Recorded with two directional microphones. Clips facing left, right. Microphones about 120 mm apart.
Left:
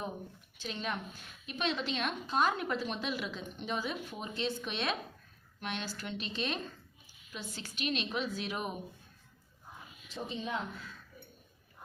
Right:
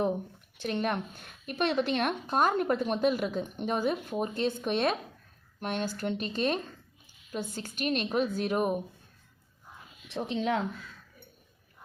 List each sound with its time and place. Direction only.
0.5 s speech: 60° right (ahead or behind)
10.1 s speech: 75° right (ahead or behind)